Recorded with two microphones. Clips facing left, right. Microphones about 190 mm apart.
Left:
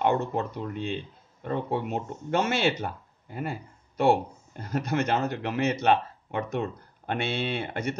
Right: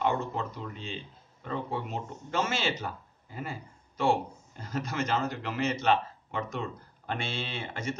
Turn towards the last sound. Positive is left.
turn(degrees=65)  # may be behind; listen again after turning